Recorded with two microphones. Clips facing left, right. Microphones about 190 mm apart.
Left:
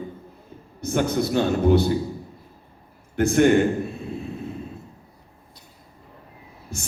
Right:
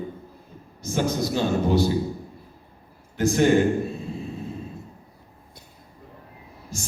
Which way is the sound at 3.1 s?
60° left (ahead or behind).